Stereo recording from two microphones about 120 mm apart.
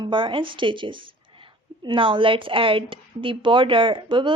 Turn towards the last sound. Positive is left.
turn(degrees=-45)  # may be behind; listen again after turning